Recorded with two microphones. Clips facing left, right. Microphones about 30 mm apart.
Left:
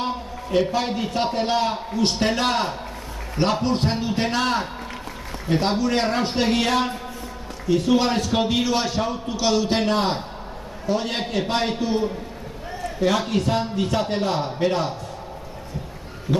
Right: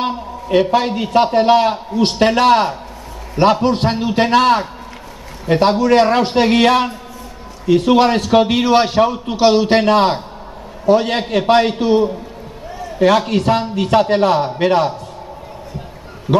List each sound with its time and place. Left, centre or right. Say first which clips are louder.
0.0 s a sound: right 6 dB; right
1.1 s a man's voice: right 12 dB; right
9.0 s a man's voice: right 9 dB; right
9.4 s a man's voice: right 9 dB; right
13.3 s a man's voice: right 6 dB; right
16.3 s speech: right 8 dB; right